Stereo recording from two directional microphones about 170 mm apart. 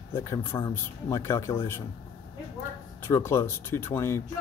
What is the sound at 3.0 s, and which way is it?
Speech, 15° left (ahead or behind).